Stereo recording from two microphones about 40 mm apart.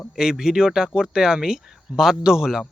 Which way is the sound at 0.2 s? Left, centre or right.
Centre.